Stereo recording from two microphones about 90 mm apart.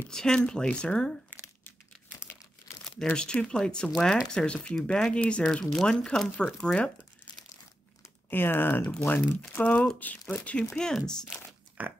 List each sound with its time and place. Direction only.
0.1 s speech: 10° left (ahead or behind)
2.8 s speech: 5° left (ahead or behind)
8.3 s speech: 20° left (ahead or behind); by 11.3 s 5° left (ahead or behind)
11.8 s a sound: 15° right (ahead or behind)